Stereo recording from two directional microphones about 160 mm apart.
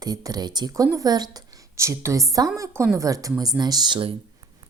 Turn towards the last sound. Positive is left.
turn(degrees=-30)  # may be behind; listen again after turning